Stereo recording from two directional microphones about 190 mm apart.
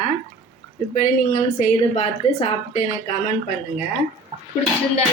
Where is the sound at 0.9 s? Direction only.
40° left (ahead or behind).